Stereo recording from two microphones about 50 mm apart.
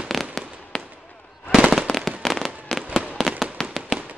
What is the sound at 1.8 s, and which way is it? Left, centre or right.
Fireworks, centre.